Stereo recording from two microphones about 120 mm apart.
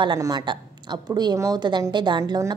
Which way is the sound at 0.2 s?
35° right (ahead or behind).